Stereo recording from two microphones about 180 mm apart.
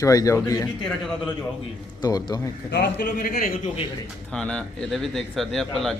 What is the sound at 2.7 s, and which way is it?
Speech, 65° left (ahead or behind).